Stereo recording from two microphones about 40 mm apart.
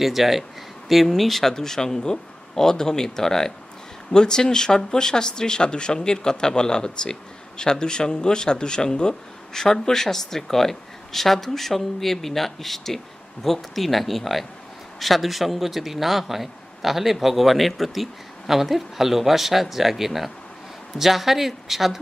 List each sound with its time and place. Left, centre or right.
0.0 s a man's voice: centre